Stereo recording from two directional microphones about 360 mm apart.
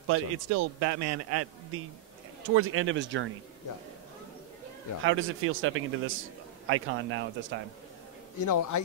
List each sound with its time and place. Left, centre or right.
0.1 s a man's voice: right
5.0 s speech: right
8.4 s a man's voice: left